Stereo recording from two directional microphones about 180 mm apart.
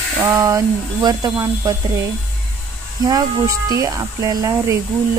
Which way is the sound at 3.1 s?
20° right (ahead or behind).